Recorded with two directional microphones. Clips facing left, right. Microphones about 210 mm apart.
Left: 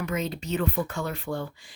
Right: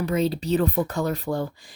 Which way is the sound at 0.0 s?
35° right (ahead or behind).